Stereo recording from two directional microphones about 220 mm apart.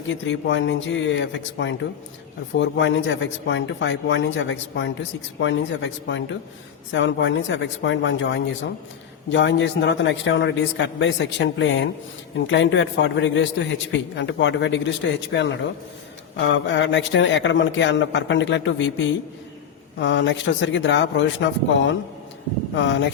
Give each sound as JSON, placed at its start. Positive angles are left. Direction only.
{"t": 0.3, "sound": "a man's voice", "side_deg": 55}